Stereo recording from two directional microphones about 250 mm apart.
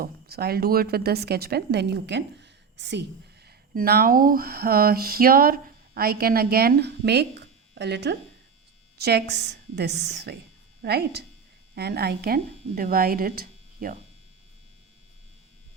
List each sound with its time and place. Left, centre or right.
0.0 s speech: right
3.4 s a sound: right
9.0 s a woman's voice: right